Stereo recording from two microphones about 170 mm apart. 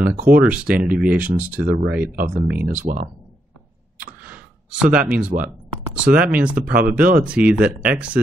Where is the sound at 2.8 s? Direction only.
55° right (ahead or behind).